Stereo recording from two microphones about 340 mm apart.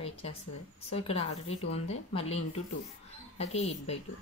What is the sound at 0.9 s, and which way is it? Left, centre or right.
Speech, centre.